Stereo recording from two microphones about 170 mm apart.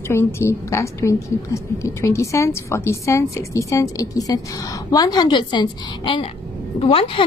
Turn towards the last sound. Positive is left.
turn(degrees=35)  # may be behind; listen again after turning